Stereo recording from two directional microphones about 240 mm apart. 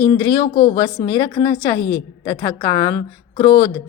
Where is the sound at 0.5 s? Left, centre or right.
Left.